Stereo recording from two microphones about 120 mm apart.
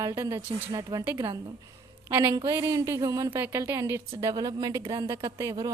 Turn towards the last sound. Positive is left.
turn(degrees=-30)  # may be behind; listen again after turning